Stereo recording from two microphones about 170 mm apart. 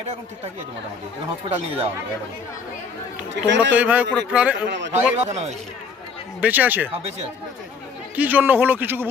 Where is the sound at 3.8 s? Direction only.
10° right (ahead or behind).